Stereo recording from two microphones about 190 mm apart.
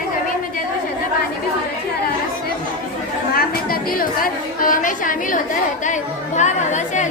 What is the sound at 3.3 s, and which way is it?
A woman's voice, 50° left (ahead or behind).